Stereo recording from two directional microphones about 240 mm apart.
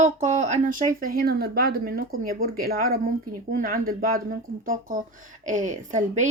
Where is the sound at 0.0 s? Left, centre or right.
Right.